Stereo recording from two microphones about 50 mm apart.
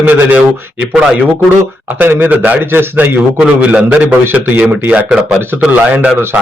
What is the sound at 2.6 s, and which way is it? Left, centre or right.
Speech, right.